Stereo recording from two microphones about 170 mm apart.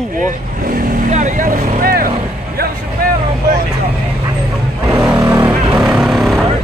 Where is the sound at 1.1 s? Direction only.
45° right (ahead or behind).